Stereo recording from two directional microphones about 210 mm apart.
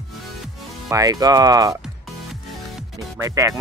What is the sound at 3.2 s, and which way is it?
Speech, 15° right (ahead or behind).